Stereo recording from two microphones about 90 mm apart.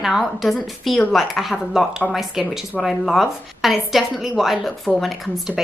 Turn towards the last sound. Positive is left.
turn(degrees=-5)  # may be behind; listen again after turning